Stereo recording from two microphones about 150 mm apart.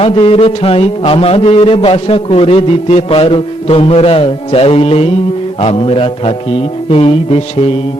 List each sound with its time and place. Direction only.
0.0 s a man's voice: 40° left (ahead or behind)